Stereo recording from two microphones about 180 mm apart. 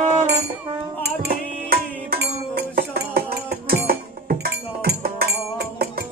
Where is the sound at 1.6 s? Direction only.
55° right (ahead or behind).